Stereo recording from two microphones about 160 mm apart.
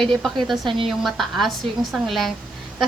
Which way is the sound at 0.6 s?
30° right (ahead or behind).